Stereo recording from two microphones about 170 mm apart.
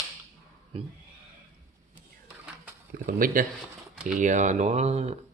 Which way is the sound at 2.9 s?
60° right (ahead or behind).